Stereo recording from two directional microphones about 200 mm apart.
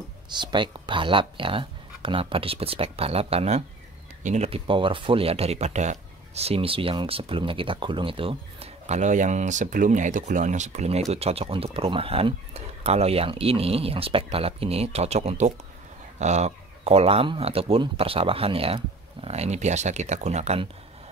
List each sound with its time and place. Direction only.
0.3 s speech: 20° right (ahead or behind)